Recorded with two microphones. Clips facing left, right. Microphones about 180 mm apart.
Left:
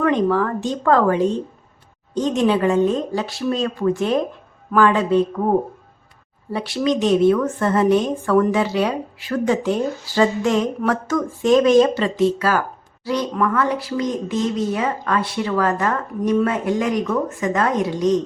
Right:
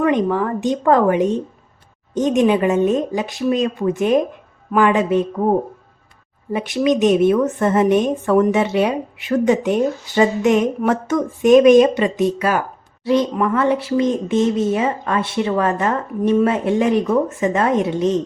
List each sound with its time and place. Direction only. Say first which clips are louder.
0.0 s a woman's voice: right 1 dB; 15° right (ahead or behind)